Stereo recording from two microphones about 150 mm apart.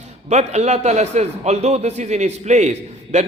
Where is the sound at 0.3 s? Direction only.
50° right (ahead or behind).